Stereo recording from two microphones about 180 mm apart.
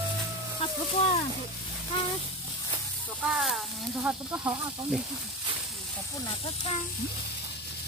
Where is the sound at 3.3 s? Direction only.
5° right (ahead or behind).